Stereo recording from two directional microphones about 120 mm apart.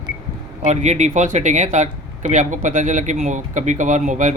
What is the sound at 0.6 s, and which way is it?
Speech, 75° right (ahead or behind).